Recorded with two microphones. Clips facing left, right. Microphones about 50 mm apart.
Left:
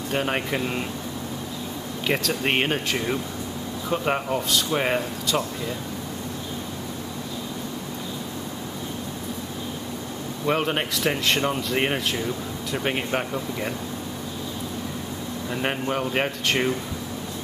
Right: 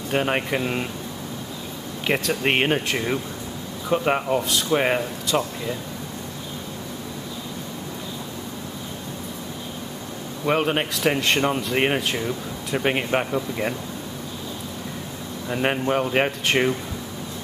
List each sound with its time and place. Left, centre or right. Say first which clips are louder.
0.1 s speech: right 3 dB; centre
2.0 s speech: right 2 dB; centre
10.4 s speech: right 2 dB; centre
15.5 s speech: right 4 dB; centre